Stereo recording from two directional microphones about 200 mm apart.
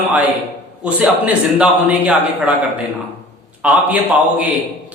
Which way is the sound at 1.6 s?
5° right (ahead or behind).